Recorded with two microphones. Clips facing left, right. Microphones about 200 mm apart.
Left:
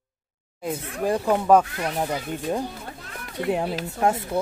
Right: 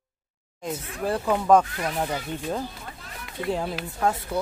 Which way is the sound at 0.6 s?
10° left (ahead or behind).